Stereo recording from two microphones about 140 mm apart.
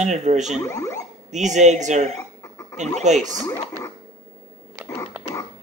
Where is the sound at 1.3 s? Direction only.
60° right (ahead or behind).